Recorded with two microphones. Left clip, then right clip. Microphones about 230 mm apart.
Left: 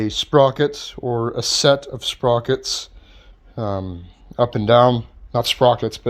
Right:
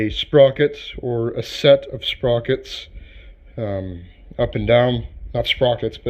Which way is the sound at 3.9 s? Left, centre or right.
Left.